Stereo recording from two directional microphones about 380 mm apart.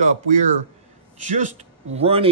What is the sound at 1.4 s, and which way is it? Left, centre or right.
Speech, centre.